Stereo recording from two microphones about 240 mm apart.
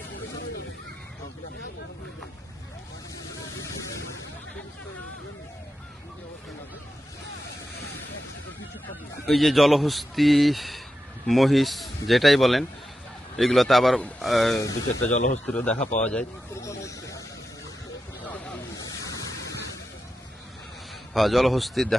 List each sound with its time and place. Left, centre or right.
9.2 s speech: centre
14.7 s speech: left
15.4 s speech: centre
21.1 s speech: centre